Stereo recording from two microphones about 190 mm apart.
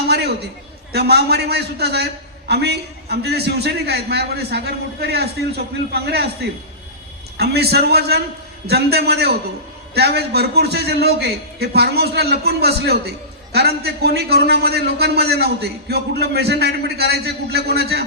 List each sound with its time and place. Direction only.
0.9 s a man's voice: 55° right (ahead or behind)